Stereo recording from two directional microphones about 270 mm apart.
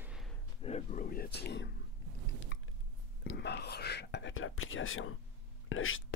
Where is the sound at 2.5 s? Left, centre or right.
Left.